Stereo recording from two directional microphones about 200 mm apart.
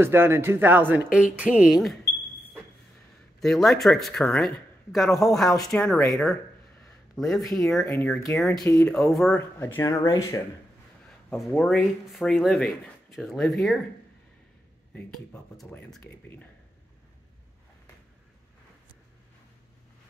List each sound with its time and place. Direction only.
0.0 s speech: 10° right (ahead or behind)
3.3 s a man's voice: centre (ahead or behind)
7.2 s speech: centre (ahead or behind)
11.1 s a sound: centre (ahead or behind)
11.5 s speech: centre (ahead or behind)
15.5 s speech: 5° left (ahead or behind)